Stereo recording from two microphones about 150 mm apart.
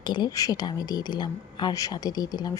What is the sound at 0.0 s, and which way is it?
Speech, 30° left (ahead or behind).